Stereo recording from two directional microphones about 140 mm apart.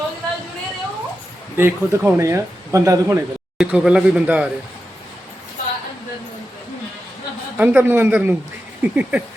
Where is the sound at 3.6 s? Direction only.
5° right (ahead or behind).